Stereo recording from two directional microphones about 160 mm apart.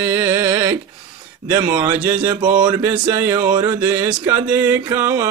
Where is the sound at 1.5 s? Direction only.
25° right (ahead or behind).